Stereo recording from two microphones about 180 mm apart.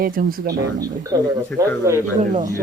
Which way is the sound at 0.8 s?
20° right (ahead or behind).